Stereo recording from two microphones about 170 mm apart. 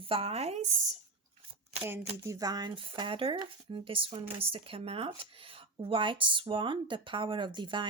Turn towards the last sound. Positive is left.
turn(degrees=-30)  # may be behind; listen again after turning